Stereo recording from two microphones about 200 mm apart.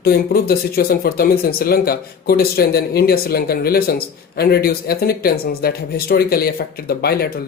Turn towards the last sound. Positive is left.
turn(degrees=50)  # may be behind; listen again after turning